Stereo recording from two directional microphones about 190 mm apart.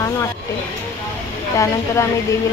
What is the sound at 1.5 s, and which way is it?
Speech, 15° left (ahead or behind).